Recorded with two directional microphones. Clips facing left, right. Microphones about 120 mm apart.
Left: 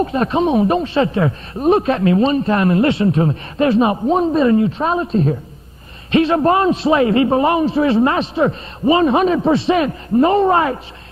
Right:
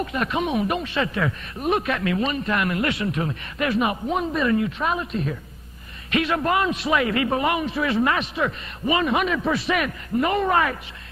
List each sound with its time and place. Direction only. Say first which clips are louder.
0.0 s speech: left 8 dB; 30° left (ahead or behind)